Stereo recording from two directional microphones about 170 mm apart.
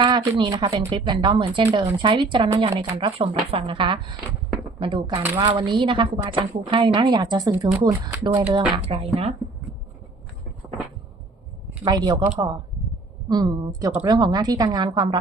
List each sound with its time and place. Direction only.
0.0 s a woman's voice: 25° right (ahead or behind)
9.4 s speech: centre (ahead or behind)
11.9 s a woman's voice: 25° right (ahead or behind)